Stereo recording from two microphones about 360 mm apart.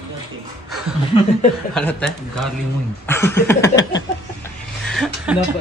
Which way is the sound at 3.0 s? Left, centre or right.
Centre.